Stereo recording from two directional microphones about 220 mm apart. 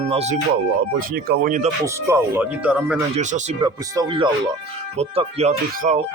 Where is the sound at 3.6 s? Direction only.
20° right (ahead or behind).